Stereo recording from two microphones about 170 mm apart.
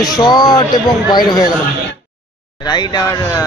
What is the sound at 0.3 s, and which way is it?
Speech, 25° left (ahead or behind).